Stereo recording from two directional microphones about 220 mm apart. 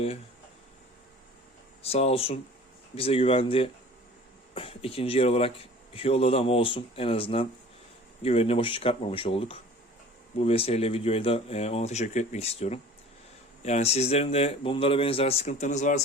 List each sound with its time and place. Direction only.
1.8 s speech: 25° left (ahead or behind)